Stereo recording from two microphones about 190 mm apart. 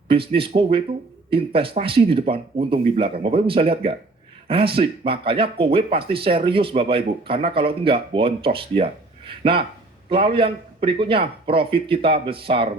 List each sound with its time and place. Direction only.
0.1 s speech: 30° right (ahead or behind)